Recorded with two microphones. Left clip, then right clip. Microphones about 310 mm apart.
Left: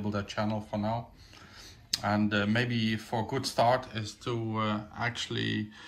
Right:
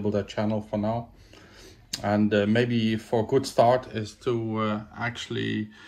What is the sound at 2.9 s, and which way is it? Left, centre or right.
Speech, left.